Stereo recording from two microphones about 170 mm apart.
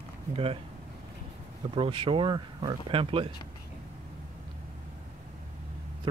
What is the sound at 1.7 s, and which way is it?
Speech, 30° right (ahead or behind).